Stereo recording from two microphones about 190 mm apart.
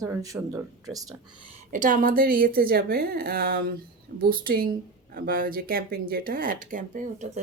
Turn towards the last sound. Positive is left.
turn(degrees=-40)  # may be behind; listen again after turning